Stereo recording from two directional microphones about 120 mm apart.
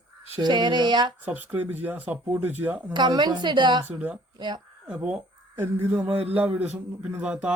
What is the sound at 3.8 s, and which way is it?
Speech, 10° right (ahead or behind).